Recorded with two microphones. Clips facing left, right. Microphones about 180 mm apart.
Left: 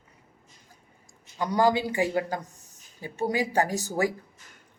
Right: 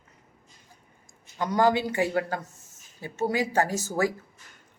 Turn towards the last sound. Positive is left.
turn(degrees=15)  # may be behind; listen again after turning